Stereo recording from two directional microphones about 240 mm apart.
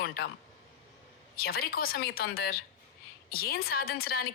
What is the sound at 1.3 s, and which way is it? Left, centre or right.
A woman's voice, left.